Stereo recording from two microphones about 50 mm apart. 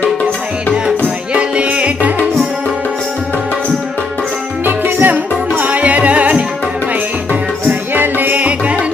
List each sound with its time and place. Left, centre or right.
1.3 s music: right
4.6 s music: right
5.5 s music: right
7.7 s music: right